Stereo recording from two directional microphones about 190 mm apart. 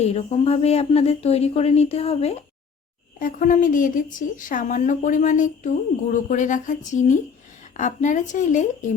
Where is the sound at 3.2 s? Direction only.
45° left (ahead or behind).